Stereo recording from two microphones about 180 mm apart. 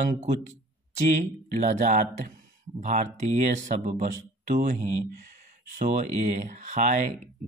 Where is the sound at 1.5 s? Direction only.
45° right (ahead or behind).